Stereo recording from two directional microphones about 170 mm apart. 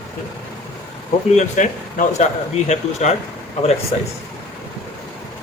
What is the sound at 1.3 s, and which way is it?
A man's voice, 45° left (ahead or behind).